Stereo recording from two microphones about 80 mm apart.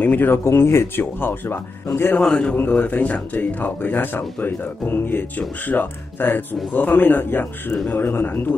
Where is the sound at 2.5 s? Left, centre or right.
Left.